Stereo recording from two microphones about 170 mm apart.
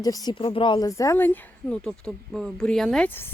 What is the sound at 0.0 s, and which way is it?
Speech, 20° left (ahead or behind).